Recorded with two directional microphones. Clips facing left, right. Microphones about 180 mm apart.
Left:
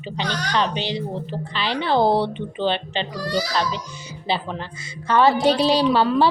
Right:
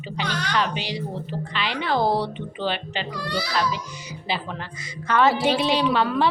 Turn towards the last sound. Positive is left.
turn(degrees=30)  # may be behind; listen again after turning